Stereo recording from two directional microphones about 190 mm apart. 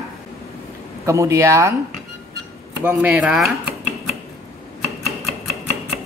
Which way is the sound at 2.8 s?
10° right (ahead or behind).